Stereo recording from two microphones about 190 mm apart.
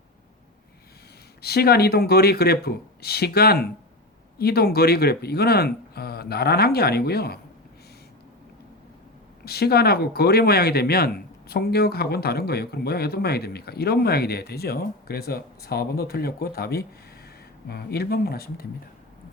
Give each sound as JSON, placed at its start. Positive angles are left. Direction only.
{"t": 1.4, "sound": "speech", "side_deg": 55}
{"t": 9.4, "sound": "speech", "side_deg": 55}